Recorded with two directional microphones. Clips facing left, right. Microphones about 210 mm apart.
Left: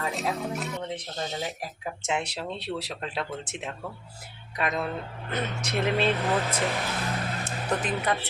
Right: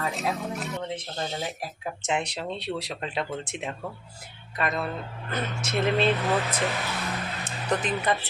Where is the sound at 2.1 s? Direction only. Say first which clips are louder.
Right 2 dB; 5° left (ahead or behind).